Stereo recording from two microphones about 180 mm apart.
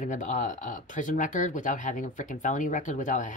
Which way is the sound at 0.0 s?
45° left (ahead or behind).